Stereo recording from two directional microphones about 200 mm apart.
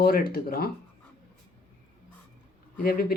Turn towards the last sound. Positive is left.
turn(degrees=50)  # may be behind; listen again after turning